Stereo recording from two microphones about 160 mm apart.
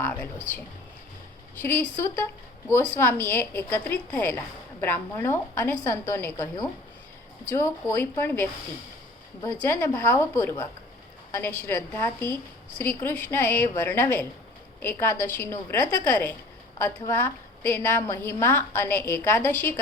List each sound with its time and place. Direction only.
0.0 s a woman's voice: 10° left (ahead or behind)
1.6 s a woman's voice: 10° left (ahead or behind)
7.5 s a woman's voice: 15° left (ahead or behind)